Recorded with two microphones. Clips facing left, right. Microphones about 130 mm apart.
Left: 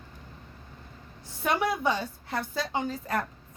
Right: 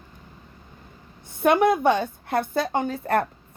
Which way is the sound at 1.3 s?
55° right (ahead or behind).